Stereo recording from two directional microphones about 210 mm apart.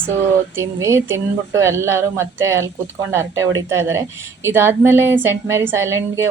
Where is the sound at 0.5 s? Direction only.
15° right (ahead or behind).